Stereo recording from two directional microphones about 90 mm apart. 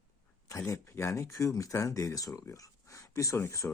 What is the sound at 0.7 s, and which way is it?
Speech, 35° left (ahead or behind).